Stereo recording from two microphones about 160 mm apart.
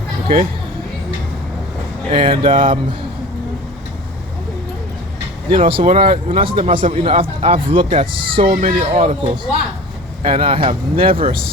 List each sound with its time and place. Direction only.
2.0 s speech: 35° right (ahead or behind)
5.5 s speech: 35° right (ahead or behind)
8.6 s speech: 45° right (ahead or behind)